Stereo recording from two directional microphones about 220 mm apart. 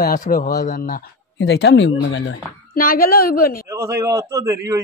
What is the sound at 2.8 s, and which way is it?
Speech, 40° left (ahead or behind).